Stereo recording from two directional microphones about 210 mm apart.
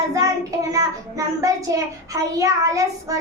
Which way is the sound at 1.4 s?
15° right (ahead or behind).